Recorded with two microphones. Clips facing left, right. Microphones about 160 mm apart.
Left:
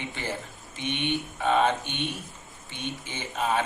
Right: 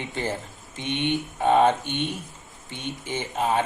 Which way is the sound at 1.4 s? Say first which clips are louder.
Right 5 dB; 35° right (ahead or behind).